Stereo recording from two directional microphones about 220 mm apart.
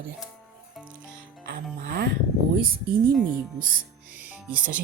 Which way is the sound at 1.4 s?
50° right (ahead or behind).